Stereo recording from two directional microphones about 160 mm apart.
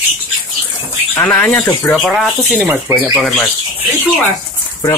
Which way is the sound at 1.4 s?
5° left (ahead or behind).